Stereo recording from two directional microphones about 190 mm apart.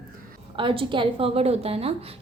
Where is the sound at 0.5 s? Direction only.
25° right (ahead or behind).